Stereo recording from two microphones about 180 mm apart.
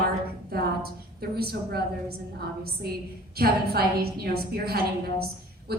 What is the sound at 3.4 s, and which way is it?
A woman's voice, 60° right (ahead or behind).